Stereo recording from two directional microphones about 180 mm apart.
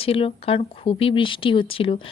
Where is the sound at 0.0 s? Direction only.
30° left (ahead or behind).